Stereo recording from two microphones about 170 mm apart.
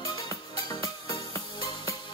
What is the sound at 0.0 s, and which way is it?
Music, 25° left (ahead or behind).